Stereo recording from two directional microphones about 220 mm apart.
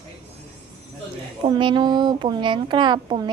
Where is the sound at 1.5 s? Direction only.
20° right (ahead or behind).